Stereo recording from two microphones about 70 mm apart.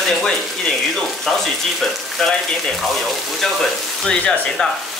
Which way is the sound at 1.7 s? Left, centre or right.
Centre.